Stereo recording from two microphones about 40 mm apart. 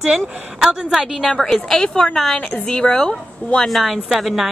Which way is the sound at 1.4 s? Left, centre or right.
Centre.